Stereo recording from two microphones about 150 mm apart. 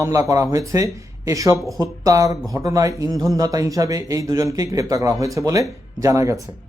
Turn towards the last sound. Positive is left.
turn(degrees=-20)  # may be behind; listen again after turning